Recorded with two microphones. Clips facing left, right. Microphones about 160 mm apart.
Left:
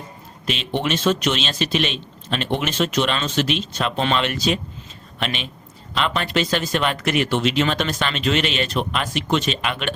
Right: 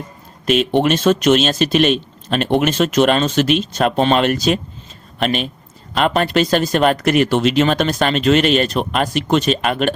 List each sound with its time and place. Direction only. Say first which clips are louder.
0.4 s speech: right 9 dB; 50° right (ahead or behind)